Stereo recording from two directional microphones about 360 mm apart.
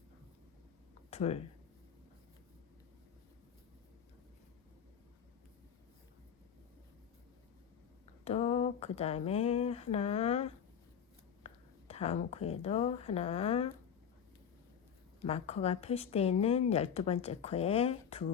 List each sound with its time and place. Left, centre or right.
1.1 s speech: centre
8.2 s speech: centre
15.2 s a woman's voice: centre